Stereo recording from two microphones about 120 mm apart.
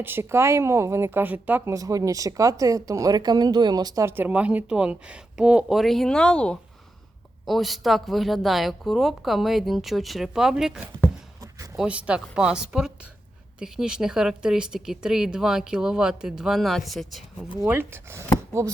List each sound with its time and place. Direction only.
0.0 s speech: 20° right (ahead or behind)
1.7 s speech: 30° right (ahead or behind)
4.0 s speech: 15° right (ahead or behind)
11.3 s a sound: 25° right (ahead or behind)
11.8 s speech: 10° right (ahead or behind)
17.6 s speech: 20° right (ahead or behind)